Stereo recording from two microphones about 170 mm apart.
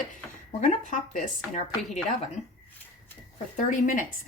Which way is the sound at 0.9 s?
45° left (ahead or behind).